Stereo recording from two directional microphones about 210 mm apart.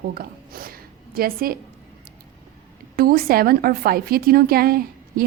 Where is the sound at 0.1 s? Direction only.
45° right (ahead or behind).